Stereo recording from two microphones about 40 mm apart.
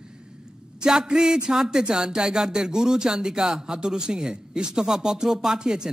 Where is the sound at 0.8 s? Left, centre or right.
Centre.